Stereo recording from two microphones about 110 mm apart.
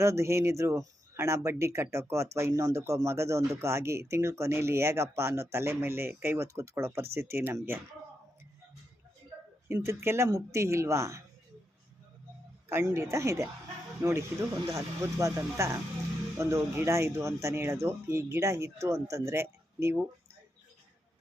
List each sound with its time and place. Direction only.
0.0 s speech: 25° right (ahead or behind)
9.6 s speech: 25° right (ahead or behind)
12.6 s speech: 25° right (ahead or behind)